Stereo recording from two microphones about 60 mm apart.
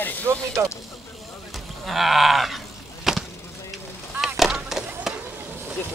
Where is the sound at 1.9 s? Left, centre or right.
Centre.